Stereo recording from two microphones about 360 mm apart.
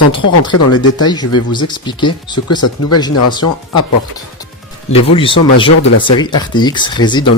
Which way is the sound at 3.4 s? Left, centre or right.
Left.